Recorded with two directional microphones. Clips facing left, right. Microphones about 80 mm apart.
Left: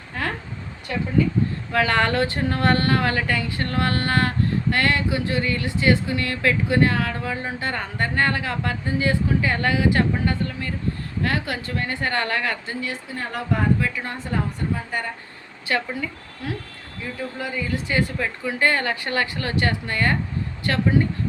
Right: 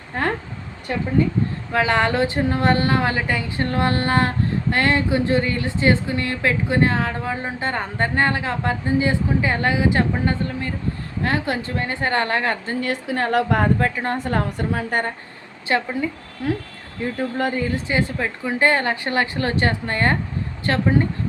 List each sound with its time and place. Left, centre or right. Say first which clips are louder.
0.1 s a woman's voice: right 5 dB; right
1.7 s a woman's voice: right 2 dB; centre
12.8 s a woman's voice: right 7 dB; right
13.7 s a woman's voice: right 5 dB; right
14.2 s a woman's voice: right 4 dB; right
15.6 s a woman's voice: right 4 dB; right
17.0 s speech: right 7 dB; right
17.8 s a woman's voice: right 1 dB; right